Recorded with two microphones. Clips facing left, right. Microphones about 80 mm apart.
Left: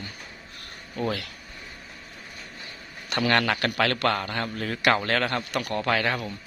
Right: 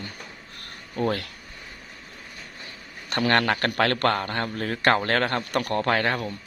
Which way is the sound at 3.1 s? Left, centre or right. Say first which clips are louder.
Right 1 dB; right.